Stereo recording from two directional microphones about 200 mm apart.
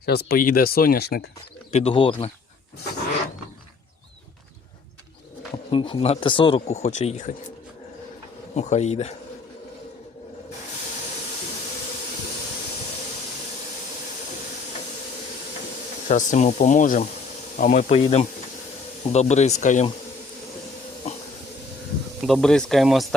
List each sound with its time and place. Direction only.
0.0 s speech: 55° left (ahead or behind)
1.7 s speech: 25° left (ahead or behind)
5.7 s speech: 25° left (ahead or behind)
8.5 s speech: 35° left (ahead or behind)
16.0 s speech: 35° left (ahead or behind)
22.2 s speech: centre (ahead or behind)